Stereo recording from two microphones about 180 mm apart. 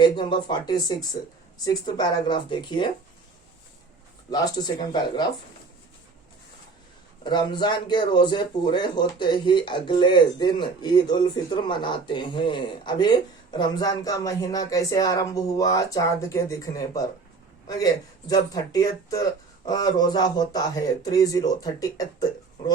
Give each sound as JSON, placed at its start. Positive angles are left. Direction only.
{"t": 0.0, "sound": "speech", "side_deg": 25}
{"t": 1.2, "sound": "speech", "side_deg": 45}
{"t": 1.6, "sound": "speech", "side_deg": 25}
{"t": 4.3, "sound": "speech", "side_deg": 20}
{"t": 7.3, "sound": "speech", "side_deg": 25}